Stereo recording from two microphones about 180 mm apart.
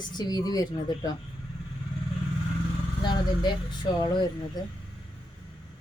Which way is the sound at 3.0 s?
25° left (ahead or behind).